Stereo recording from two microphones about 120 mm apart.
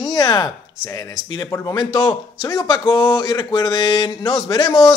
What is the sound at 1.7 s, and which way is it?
Speech, 40° left (ahead or behind).